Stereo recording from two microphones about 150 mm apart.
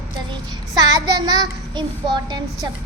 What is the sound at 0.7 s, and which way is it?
Child singing, 25° right (ahead or behind).